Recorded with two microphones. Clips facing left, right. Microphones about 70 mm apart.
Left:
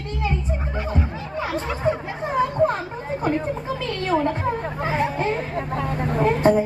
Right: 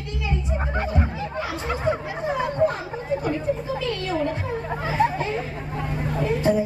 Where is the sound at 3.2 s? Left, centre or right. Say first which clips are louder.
Left 1 dB; left.